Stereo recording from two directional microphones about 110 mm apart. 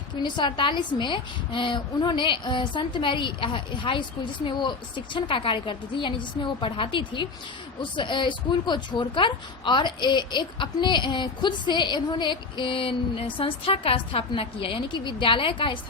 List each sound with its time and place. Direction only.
0.2 s speech: 45° left (ahead or behind)
5.1 s speech: 50° left (ahead or behind)